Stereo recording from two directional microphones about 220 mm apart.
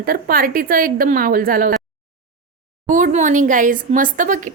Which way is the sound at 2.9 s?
35° right (ahead or behind).